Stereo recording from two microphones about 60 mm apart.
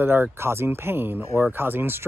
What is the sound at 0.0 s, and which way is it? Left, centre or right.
Speech, right.